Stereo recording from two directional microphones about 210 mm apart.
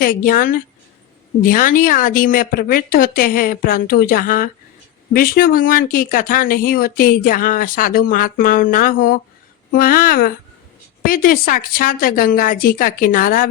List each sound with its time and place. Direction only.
0.0 s a woman's voice: 40° left (ahead or behind)